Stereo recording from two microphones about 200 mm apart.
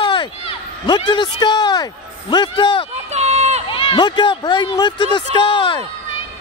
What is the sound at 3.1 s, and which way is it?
Run, 35° right (ahead or behind).